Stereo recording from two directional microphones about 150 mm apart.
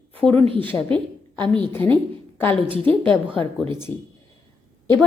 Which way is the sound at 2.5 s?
35° right (ahead or behind).